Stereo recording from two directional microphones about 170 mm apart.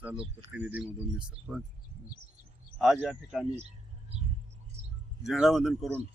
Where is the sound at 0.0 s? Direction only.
10° right (ahead or behind).